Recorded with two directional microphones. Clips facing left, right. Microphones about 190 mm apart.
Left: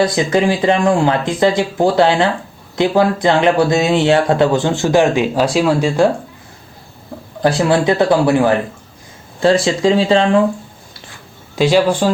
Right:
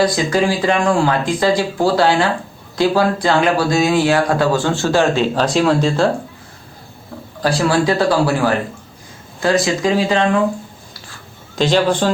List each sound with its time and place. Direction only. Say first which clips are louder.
0.0 s speech: left 2 dB; 25° left (ahead or behind)
7.4 s speech: left 2 dB; 20° left (ahead or behind)
11.5 s a man's voice: left 2 dB; 10° left (ahead or behind)